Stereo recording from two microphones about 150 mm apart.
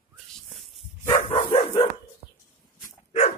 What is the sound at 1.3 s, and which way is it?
Dog, 35° left (ahead or behind).